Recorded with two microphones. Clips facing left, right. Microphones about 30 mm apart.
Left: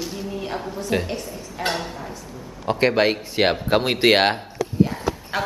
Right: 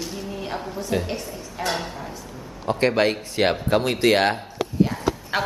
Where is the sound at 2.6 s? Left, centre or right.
Centre.